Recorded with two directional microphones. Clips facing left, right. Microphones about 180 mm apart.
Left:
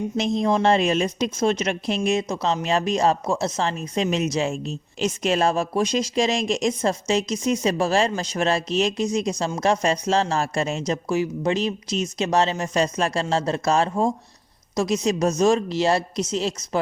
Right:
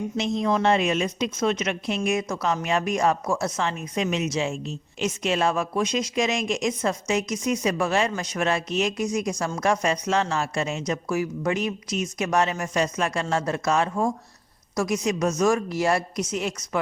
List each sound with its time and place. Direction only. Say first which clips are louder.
0.4 s speech: left 2 dB; 30° left (ahead or behind)
2.0 s speech: left 2 dB; 25° left (ahead or behind)